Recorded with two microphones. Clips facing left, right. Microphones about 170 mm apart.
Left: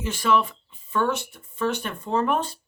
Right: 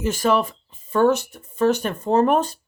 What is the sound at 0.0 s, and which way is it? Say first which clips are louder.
Speech: right 3 dB; 40° right (ahead or behind).